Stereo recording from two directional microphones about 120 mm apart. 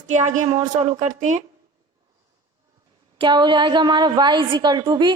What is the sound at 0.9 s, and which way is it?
Speech, 90° right.